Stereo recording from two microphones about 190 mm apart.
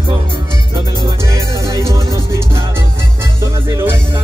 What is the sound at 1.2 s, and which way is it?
Music, 15° right (ahead or behind).